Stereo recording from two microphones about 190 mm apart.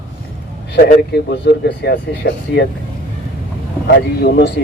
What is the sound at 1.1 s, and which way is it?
Speech, 65° left (ahead or behind).